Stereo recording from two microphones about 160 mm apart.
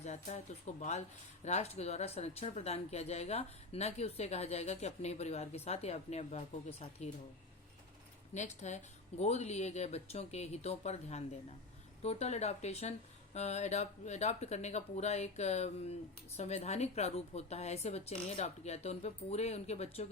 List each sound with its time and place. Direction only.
0.0 s speech: 45° left (ahead or behind)
8.3 s speech: 45° left (ahead or behind)